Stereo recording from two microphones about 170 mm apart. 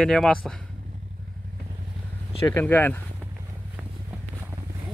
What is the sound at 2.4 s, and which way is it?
Speech, 15° left (ahead or behind).